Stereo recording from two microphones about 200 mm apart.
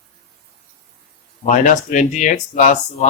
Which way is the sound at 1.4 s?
35° left (ahead or behind).